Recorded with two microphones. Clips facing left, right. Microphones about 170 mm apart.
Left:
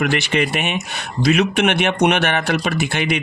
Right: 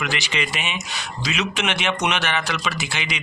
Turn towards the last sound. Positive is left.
turn(degrees=55)  # may be behind; listen again after turning